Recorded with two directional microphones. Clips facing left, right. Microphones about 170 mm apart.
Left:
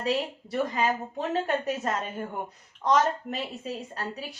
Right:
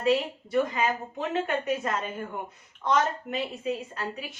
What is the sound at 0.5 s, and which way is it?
A woman's voice, 40° left (ahead or behind).